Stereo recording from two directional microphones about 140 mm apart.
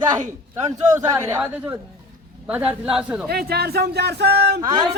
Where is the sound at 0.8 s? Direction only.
25° right (ahead or behind).